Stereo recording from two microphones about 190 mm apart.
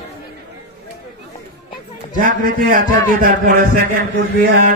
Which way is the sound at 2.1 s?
45° right (ahead or behind).